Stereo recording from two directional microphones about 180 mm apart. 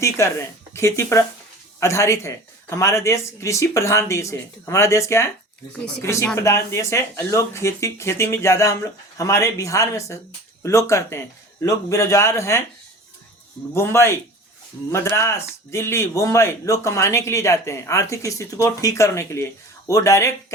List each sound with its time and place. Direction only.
0.0 s speech: 15° left (ahead or behind)
13.7 s speech: 15° left (ahead or behind)